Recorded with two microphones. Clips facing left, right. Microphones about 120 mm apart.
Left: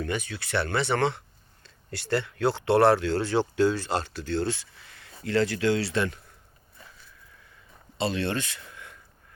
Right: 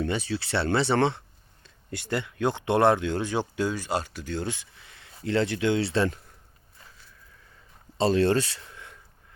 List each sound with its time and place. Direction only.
0.0 s speech: 30° right (ahead or behind)
7.9 s speech: 40° right (ahead or behind)